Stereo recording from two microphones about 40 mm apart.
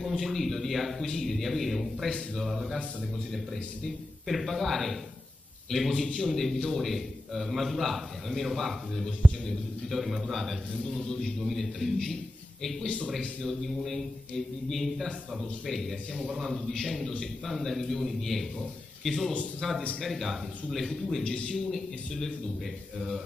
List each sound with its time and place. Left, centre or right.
0.2 s a man's voice: centre
2.0 s a man's voice: centre
2.5 s speech: centre
4.3 s a man's voice: centre
12.8 s a man's voice: left
13.4 s a man's voice: centre
16.7 s a man's voice: centre
21.2 s a man's voice: centre
21.5 s a man's voice: centre